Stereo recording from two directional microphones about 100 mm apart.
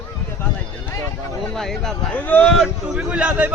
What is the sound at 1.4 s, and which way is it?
Speech, 5° left (ahead or behind).